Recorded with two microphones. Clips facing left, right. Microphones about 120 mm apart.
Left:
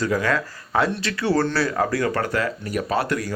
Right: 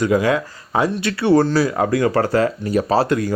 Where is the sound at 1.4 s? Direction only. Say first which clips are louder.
Right 4 dB; 15° right (ahead or behind).